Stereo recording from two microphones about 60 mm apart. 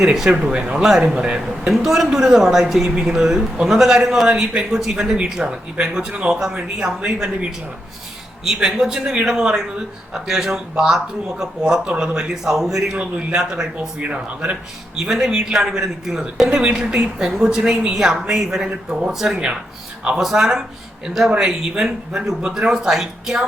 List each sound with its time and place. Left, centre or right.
0.0 s speech: centre
2.8 s speech: centre
13.7 s speech: right
14.9 s speech: centre